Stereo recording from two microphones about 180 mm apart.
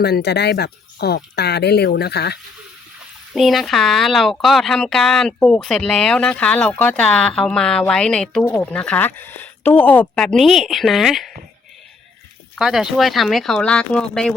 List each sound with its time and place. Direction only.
0.0 s speech: 65° left (ahead or behind)
3.3 s speech: centre (ahead or behind)
12.5 s speech: 5° right (ahead or behind)